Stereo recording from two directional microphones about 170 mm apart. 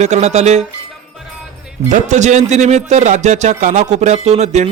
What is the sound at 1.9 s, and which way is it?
A man's voice, 45° right (ahead or behind).